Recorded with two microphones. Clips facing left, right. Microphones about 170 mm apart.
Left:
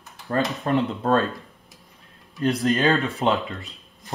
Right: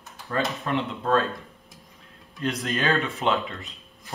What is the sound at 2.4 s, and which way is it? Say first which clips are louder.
Speech: left 6 dB; 35° left (ahead or behind).